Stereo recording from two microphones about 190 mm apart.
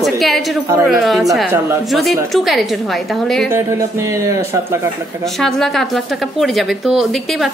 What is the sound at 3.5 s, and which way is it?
Speech, 15° right (ahead or behind).